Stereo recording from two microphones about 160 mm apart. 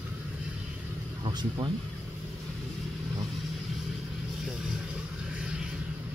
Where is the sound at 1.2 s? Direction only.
25° right (ahead or behind).